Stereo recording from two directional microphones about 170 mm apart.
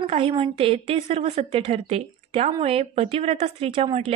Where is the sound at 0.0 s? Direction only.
35° right (ahead or behind).